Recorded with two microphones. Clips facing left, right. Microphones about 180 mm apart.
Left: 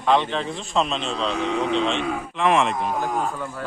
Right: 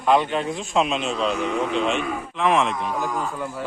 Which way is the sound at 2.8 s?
40° left (ahead or behind).